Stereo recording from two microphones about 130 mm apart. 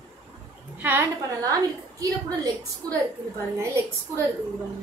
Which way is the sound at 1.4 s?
25° right (ahead or behind).